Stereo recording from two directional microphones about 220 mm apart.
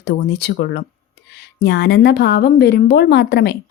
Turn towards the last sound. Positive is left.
turn(degrees=45)  # may be behind; listen again after turning